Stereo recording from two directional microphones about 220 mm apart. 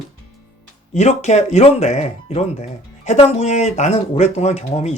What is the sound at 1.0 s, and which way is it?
Speech, 30° left (ahead or behind).